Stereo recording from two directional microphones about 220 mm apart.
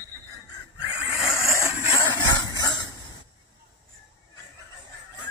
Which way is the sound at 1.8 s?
20° left (ahead or behind).